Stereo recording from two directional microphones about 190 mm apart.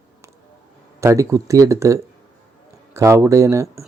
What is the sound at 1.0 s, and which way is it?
Speech, 15° right (ahead or behind).